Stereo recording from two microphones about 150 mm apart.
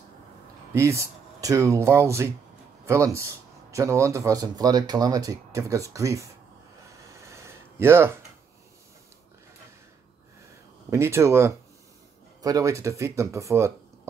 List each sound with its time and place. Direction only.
0.7 s speech: 20° right (ahead or behind)
7.0 s a sound: 20° right (ahead or behind)
10.9 s speech: 20° right (ahead or behind)